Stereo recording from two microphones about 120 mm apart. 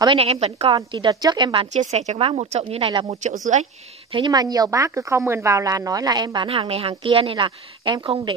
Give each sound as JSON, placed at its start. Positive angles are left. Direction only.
{"t": 0.0, "sound": "a woman's voice", "side_deg": -50}
{"t": 0.7, "sound": "a woman's voice", "side_deg": -35}
{"t": 1.7, "sound": "speech", "side_deg": -70}
{"t": 2.1, "sound": "speech", "side_deg": -55}
{"t": 3.1, "sound": "a woman's voice", "side_deg": -80}
{"t": 4.1, "sound": "a woman's voice", "side_deg": -35}